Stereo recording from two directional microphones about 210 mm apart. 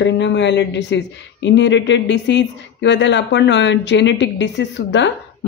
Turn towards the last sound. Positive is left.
turn(degrees=60)  # may be behind; listen again after turning